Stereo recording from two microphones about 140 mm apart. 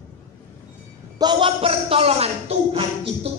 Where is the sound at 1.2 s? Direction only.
35° right (ahead or behind).